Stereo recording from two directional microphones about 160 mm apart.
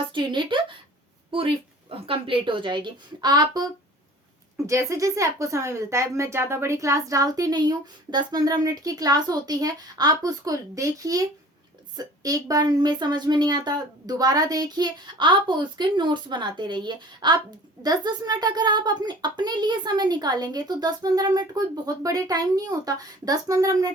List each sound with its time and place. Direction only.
0.1 s a woman's voice: 30° right (ahead or behind)